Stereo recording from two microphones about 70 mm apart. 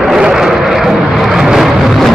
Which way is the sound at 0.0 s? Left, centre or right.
Centre.